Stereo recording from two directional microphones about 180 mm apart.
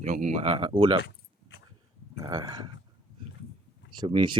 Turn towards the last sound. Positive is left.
turn(degrees=-25)  # may be behind; listen again after turning